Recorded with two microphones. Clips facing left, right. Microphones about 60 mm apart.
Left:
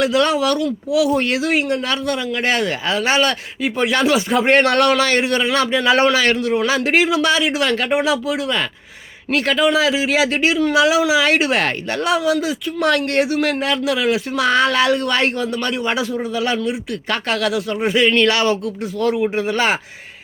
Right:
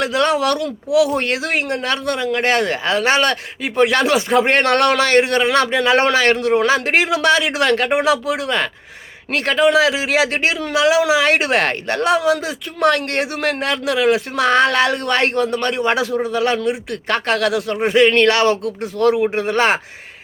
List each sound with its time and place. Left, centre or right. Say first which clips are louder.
0.0 s speech: left 1 dB; right
0.3 s speech: even; right
9.3 s speech: right 1 dB; right
19.2 s speech: right 2 dB; right